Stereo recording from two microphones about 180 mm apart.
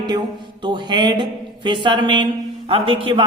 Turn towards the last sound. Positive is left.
turn(degrees=-30)  # may be behind; listen again after turning